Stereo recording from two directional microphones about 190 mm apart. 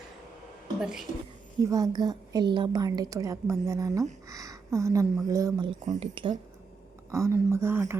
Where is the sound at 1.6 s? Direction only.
20° right (ahead or behind).